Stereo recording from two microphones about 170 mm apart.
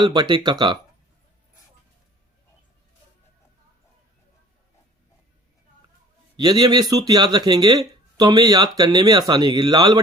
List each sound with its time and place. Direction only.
0.0 s speech: 25° right (ahead or behind)
6.3 s speech: 25° right (ahead or behind)